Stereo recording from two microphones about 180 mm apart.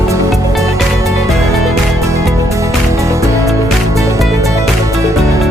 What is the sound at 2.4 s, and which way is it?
Music, 15° right (ahead or behind).